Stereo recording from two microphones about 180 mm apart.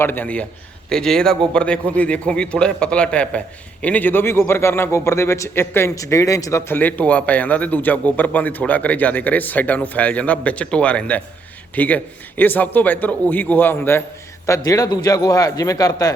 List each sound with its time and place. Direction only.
0.0 s a man's voice: 10° left (ahead or behind)